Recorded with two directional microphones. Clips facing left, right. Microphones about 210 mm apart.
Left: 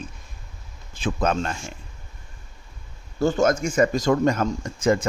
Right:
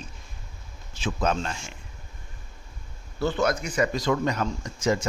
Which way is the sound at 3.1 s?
45° left (ahead or behind).